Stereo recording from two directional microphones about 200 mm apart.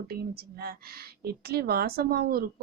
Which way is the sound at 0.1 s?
50° right (ahead or behind).